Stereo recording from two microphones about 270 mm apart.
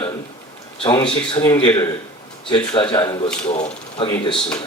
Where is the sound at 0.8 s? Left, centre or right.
Centre.